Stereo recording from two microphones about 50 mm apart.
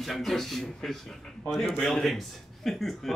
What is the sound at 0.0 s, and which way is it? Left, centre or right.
A man's voice, centre.